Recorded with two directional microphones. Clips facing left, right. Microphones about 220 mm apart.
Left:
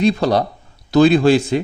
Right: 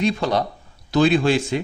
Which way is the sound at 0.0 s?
35° left (ahead or behind).